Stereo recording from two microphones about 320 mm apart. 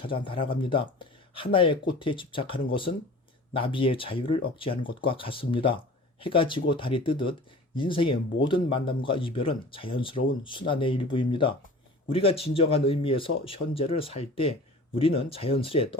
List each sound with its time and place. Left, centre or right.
0.0 s speech: centre